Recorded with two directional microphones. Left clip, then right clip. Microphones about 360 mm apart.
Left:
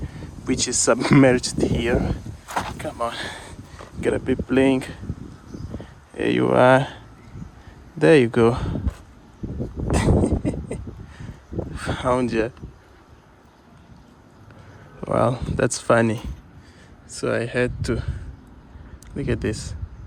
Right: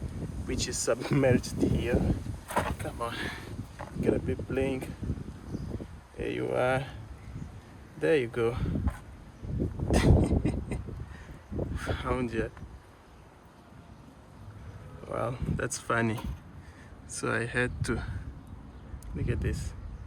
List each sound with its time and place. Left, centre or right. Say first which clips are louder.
0.4 s speech: left 10 dB; centre
2.5 s a sound: left 4 dB; centre
2.7 s speech: left 8 dB; centre
6.1 s speech: left 12 dB; centre
8.0 s speech: left 11 dB; centre
9.9 s a sound: left 6 dB; centre
15.1 s speech: left 12 dB; centre
19.1 s speech: left 10 dB; centre